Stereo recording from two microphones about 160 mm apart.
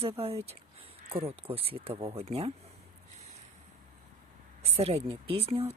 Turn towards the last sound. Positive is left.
turn(degrees=-40)  # may be behind; listen again after turning